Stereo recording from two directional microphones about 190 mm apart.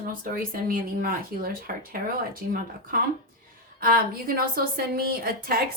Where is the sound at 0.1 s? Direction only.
45° right (ahead or behind).